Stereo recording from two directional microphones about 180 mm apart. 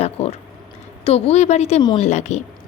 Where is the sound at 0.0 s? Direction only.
35° left (ahead or behind).